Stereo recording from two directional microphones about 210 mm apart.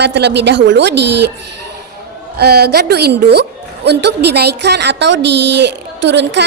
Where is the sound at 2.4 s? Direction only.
50° right (ahead or behind).